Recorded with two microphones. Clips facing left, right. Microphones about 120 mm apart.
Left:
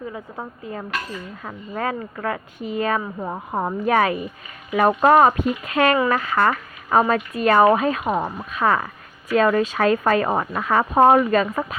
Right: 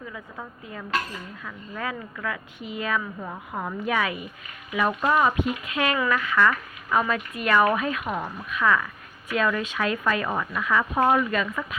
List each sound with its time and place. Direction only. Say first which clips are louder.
0.1 s speech: left 5 dB; 35° left (ahead or behind)